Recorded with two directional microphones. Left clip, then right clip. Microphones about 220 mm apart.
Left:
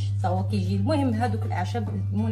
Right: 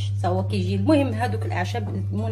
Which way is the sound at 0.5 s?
35° right (ahead or behind).